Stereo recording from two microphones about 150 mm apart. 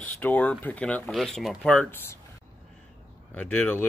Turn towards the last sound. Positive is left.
turn(degrees=10)  # may be behind; listen again after turning